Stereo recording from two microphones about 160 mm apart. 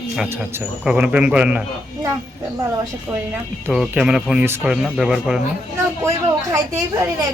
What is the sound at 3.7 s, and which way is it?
Speech, 5° right (ahead or behind).